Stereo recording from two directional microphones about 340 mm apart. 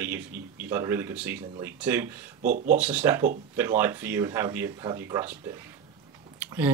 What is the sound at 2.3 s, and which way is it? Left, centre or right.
Speech, right.